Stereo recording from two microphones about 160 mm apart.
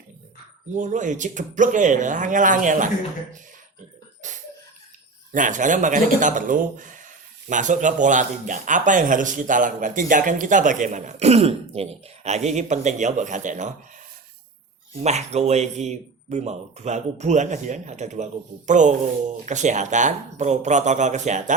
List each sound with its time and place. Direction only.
0.7 s speech: 50° right (ahead or behind)
4.2 s a sound: 50° right (ahead or behind)
5.3 s speech: 55° right (ahead or behind)
15.0 s speech: 45° right (ahead or behind)